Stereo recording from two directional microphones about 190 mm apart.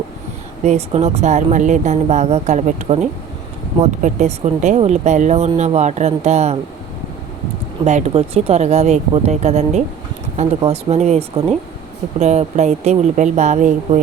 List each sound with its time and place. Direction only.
0.6 s speech: 35° right (ahead or behind)
7.9 s speech: 35° right (ahead or behind)